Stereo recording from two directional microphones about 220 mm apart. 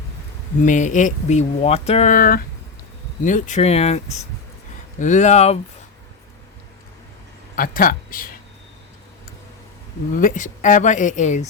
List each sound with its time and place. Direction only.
0.6 s speech: 35° left (ahead or behind)
7.5 s speech: 40° left (ahead or behind)
10.2 s speech: 35° left (ahead or behind)